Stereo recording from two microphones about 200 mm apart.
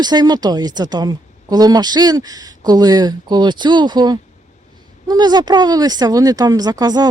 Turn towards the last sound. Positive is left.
turn(degrees=-20)  # may be behind; listen again after turning